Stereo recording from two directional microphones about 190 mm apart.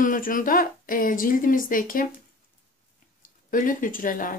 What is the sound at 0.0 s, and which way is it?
Speech, 45° left (ahead or behind).